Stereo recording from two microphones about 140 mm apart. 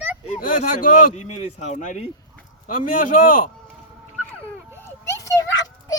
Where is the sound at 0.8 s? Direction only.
80° left; by 2.1 s 60° left (ahead or behind).